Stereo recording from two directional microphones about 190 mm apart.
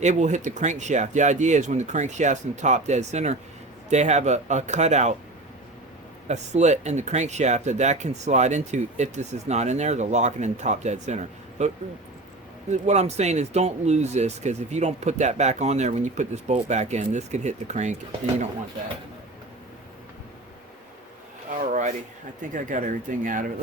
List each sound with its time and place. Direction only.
0.0 s speech: 40° right (ahead or behind)
6.2 s speech: 40° right (ahead or behind)
12.7 s speech: 35° right (ahead or behind)
21.7 s speech: 40° right (ahead or behind)